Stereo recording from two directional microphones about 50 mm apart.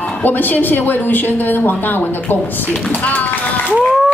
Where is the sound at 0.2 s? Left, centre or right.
Left.